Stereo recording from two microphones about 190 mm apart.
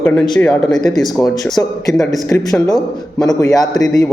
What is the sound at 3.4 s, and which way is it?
Speech, 20° left (ahead or behind).